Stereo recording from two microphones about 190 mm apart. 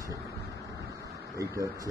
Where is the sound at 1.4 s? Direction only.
15° right (ahead or behind).